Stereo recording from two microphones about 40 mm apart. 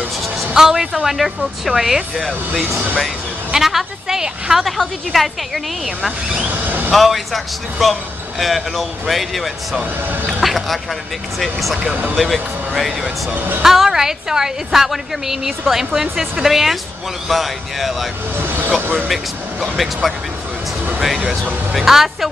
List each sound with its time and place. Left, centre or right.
0.6 s a woman's voice: centre
3.5 s a woman's voice: centre
4.6 s speech: centre
6.5 s vehicle: right
6.9 s speech: centre
13.3 s a woman's voice: right
13.7 s a woman's voice: centre
18.4 s vehicle: right
19.6 s speech: centre
21.7 s a woman's voice: centre